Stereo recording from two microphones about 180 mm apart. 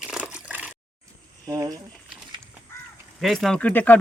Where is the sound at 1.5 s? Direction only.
20° right (ahead or behind).